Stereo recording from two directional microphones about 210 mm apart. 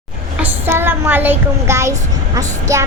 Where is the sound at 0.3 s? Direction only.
10° right (ahead or behind).